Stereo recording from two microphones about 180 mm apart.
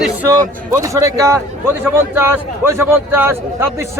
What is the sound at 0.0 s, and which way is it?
A man's voice, 10° right (ahead or behind).